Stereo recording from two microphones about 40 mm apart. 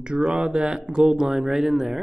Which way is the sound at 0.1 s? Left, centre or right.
Right.